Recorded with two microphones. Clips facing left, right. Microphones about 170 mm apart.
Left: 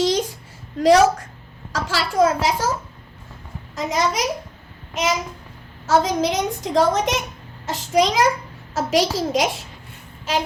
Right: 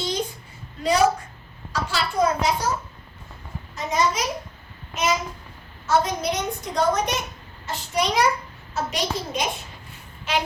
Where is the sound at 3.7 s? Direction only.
90° left.